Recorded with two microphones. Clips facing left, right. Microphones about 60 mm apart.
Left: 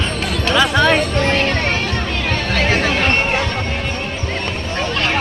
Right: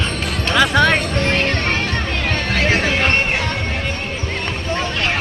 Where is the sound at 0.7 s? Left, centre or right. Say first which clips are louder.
Even; right.